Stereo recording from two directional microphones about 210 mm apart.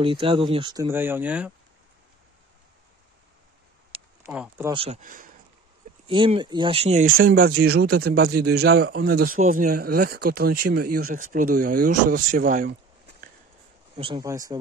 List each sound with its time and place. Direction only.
0.0 s speech: 25° right (ahead or behind); by 1.5 s 5° right (ahead or behind)
3.9 s a sound: 25° right (ahead or behind)
4.3 s speech: 5° right (ahead or behind)
4.6 s speech: 25° right (ahead or behind)
6.0 s speech: 25° right (ahead or behind)
7.2 s speech: 45° right (ahead or behind)
13.9 s speech: 25° right (ahead or behind)